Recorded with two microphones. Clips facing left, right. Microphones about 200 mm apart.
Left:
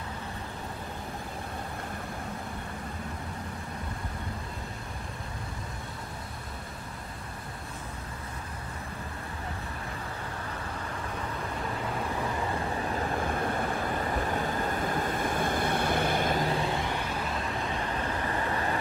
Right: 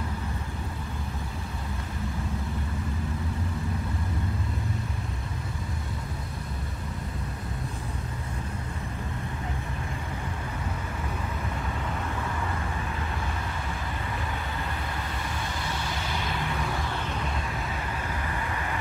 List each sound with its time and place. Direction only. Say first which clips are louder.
13.3 s vehicle: left 5 dB; 55° left (ahead or behind)
18.3 s vehicle: left 3 dB; 35° left (ahead or behind)